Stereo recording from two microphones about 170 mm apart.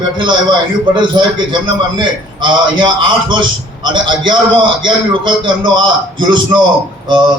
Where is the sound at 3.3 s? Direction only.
30° right (ahead or behind).